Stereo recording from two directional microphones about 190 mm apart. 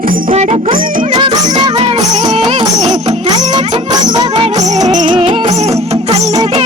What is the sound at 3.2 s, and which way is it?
Music, 20° right (ahead or behind).